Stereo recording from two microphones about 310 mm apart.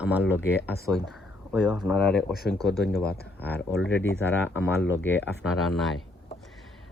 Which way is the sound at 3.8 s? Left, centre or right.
Left.